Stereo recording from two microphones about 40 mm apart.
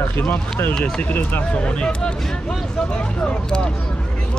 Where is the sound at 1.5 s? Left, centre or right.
Left.